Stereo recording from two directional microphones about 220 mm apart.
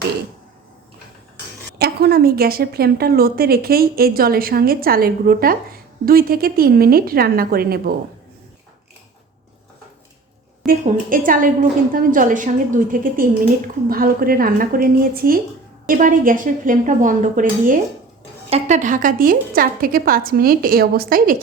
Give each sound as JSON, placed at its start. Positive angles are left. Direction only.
{"t": 1.8, "sound": "a woman's voice", "side_deg": -45}
{"t": 10.7, "sound": "a woman's voice", "side_deg": -35}